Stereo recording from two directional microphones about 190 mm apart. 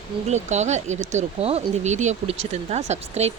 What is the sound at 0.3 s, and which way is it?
Speech, 35° right (ahead or behind).